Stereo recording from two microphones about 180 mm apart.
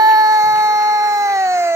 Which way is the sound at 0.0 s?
20° right (ahead or behind).